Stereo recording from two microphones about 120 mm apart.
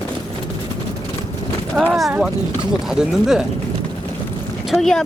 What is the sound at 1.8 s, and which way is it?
Speech, 5° left (ahead or behind).